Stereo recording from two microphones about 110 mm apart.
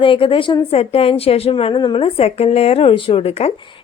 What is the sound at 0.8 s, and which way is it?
A woman's voice, 60° left (ahead or behind).